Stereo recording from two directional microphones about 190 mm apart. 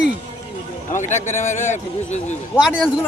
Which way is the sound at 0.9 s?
40° left (ahead or behind).